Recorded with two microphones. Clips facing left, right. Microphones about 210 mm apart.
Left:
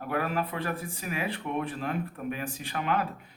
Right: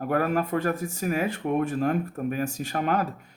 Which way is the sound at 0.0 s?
45° right (ahead or behind).